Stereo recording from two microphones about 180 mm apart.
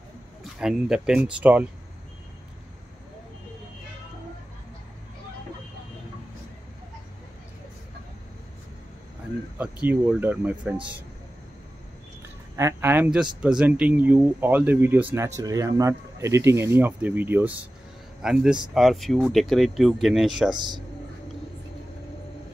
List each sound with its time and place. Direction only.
0.4 s speech: 5° right (ahead or behind)
9.6 s speech: 5° right (ahead or behind)
12.5 s speech: 15° right (ahead or behind)
20.5 s speech: 25° right (ahead or behind)